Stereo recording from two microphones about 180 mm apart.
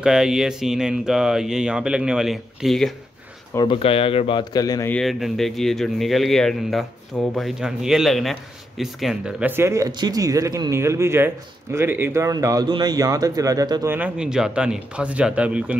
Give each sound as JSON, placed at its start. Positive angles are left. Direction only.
{"t": 0.0, "sound": "speech", "side_deg": -5}
{"t": 3.5, "sound": "speech", "side_deg": 25}
{"t": 4.9, "sound": "speech", "side_deg": 0}
{"t": 13.9, "sound": "speech", "side_deg": -5}